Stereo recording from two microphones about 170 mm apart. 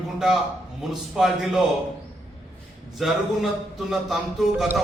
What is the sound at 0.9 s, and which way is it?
Speech, centre (ahead or behind).